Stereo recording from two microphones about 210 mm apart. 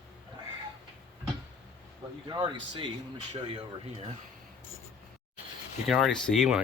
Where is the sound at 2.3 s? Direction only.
20° right (ahead or behind).